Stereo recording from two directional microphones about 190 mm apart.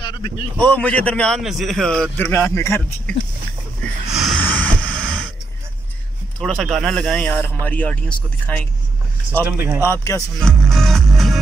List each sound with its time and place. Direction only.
0.0 s a sound: 25° left (ahead or behind)
0.6 s a man's voice: 5° left (ahead or behind)
4.1 s snort: centre (ahead or behind)
6.4 s speech: centre (ahead or behind)
9.4 s speech: 10° right (ahead or behind)
9.8 s speech: 15° left (ahead or behind)
10.4 s music: 5° left (ahead or behind)